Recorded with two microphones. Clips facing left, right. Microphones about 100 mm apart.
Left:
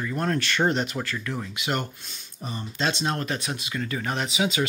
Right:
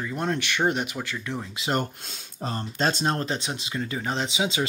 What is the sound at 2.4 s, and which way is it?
Speech, 85° right.